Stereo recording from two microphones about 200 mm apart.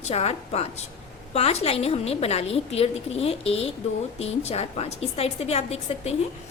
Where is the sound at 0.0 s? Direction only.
30° left (ahead or behind).